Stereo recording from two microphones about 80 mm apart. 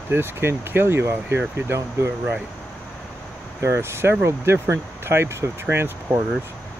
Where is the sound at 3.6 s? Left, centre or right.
Right.